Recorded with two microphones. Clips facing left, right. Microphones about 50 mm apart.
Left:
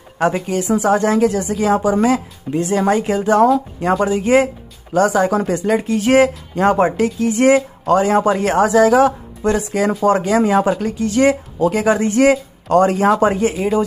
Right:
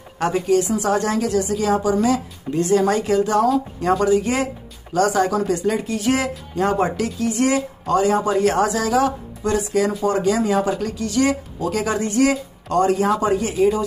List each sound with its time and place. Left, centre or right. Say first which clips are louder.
0.2 s a woman's voice: even; left
2.5 s a woman's voice: left 1 dB; left
5.3 s a woman's voice: left 3 dB; left